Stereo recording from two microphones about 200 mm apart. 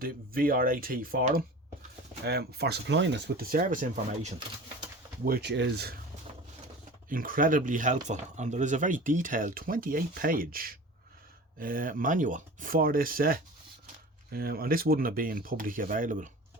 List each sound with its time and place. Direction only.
0.0 s speech: 45° right (ahead or behind)
5.2 s speech: 50° right (ahead or behind)
7.1 s speech: 45° right (ahead or behind)